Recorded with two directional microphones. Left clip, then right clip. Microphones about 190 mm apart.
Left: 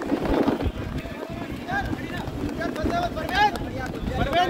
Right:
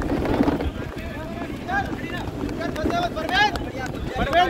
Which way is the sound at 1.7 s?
25° left (ahead or behind).